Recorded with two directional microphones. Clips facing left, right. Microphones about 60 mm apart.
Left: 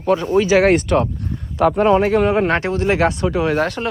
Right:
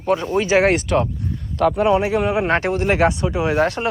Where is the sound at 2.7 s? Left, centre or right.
Right.